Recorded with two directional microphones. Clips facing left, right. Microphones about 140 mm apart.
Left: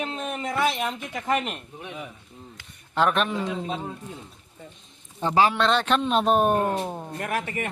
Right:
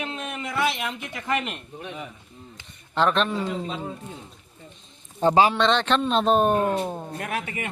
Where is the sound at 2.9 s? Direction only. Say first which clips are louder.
Right 1 dB; 5° left (ahead or behind).